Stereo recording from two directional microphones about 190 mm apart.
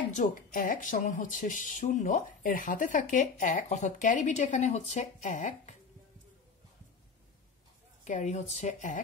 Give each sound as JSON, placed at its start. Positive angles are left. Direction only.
{"t": 0.1, "sound": "speech", "side_deg": 45}
{"t": 8.0, "sound": "speech", "side_deg": 40}